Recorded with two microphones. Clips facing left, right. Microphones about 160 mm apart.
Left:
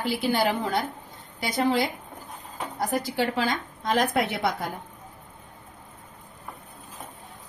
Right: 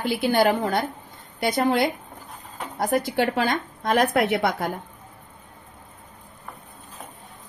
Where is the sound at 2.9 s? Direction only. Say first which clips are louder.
Right 5 dB; 60° right (ahead or behind).